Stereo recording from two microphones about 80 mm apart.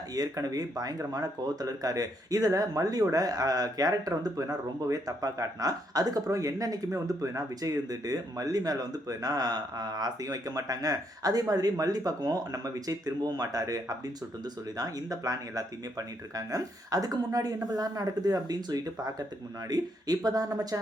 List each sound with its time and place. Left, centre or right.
0.1 s speech: right